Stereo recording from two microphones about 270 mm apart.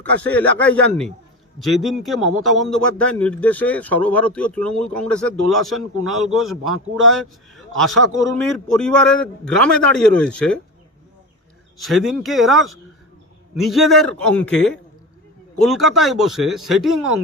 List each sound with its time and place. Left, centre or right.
0.0 s a man's voice: centre
6.7 s a man's voice: right
7.1 s a man's voice: centre
11.8 s a man's voice: centre